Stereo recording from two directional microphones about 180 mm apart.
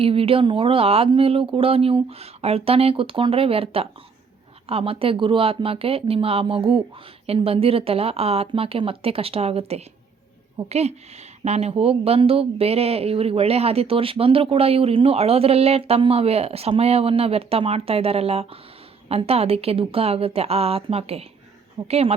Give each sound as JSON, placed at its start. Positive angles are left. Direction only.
{"t": 0.0, "sound": "speech", "side_deg": -30}